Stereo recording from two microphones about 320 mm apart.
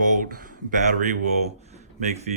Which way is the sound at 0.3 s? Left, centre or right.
Right.